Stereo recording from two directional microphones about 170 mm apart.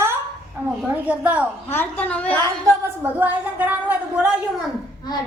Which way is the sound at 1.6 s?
10° left (ahead or behind).